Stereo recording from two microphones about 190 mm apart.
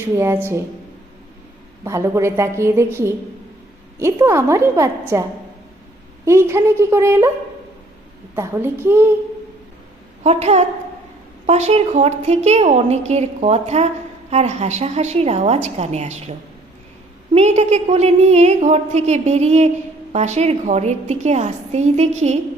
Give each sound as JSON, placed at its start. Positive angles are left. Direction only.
{"t": 1.8, "sound": "a woman's voice", "side_deg": -15}
{"t": 6.2, "sound": "a woman's voice", "side_deg": -15}
{"t": 8.4, "sound": "a woman's voice", "side_deg": -10}
{"t": 10.2, "sound": "a woman's voice", "side_deg": -35}
{"t": 17.3, "sound": "a woman's voice", "side_deg": -35}